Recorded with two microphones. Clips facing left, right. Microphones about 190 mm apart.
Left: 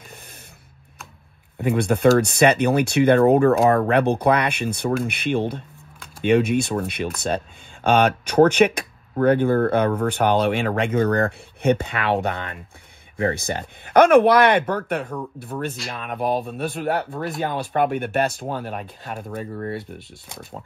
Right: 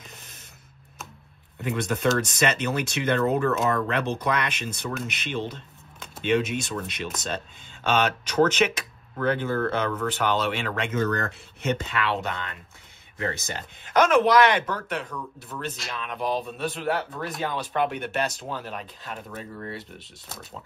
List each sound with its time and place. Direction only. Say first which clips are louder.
1.6 s speech: left 8 dB; 55° left (ahead or behind)
15.5 s speech: left 7 dB; 40° left (ahead or behind)
15.9 s speech: left 4 dB; 50° left (ahead or behind)